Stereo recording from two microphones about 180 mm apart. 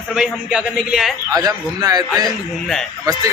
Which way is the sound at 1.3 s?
20° right (ahead or behind).